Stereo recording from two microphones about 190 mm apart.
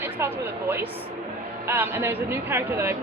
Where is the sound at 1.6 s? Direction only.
10° right (ahead or behind).